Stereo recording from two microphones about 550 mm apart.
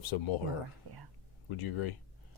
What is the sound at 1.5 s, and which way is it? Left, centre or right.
Speech, left.